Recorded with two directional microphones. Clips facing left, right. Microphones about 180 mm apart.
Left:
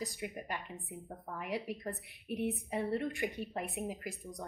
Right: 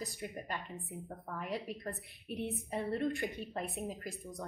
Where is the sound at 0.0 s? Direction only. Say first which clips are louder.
Left 1 dB; 15° left (ahead or behind).